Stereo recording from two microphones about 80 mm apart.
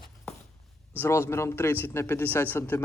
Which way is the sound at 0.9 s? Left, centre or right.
Left.